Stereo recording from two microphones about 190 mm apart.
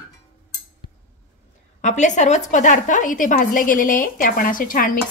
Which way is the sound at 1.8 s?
40° left (ahead or behind).